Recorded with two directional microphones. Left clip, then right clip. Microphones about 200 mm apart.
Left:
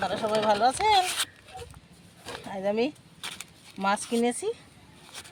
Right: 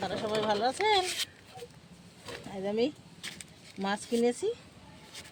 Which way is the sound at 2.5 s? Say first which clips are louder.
Left 4 dB; 45° left (ahead or behind).